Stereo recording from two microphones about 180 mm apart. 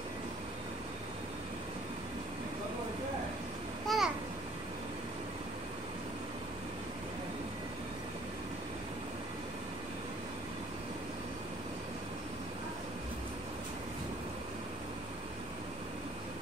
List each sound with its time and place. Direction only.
3.8 s babbling: centre (ahead or behind)